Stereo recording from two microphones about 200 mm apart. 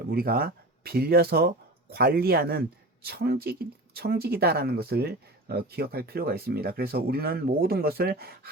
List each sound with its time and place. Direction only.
0.1 s speech: 50° right (ahead or behind)